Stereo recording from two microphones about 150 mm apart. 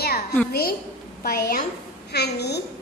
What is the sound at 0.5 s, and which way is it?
A woman's voice, 85° left.